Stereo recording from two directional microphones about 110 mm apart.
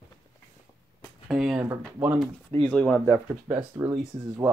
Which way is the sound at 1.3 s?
5° right (ahead or behind).